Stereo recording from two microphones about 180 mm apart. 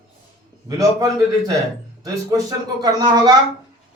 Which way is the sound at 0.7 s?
20° right (ahead or behind).